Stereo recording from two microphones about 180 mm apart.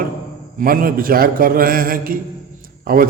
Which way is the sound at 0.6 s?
50° right (ahead or behind).